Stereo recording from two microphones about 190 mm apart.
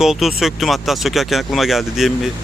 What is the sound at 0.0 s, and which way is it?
Speech, centre (ahead or behind).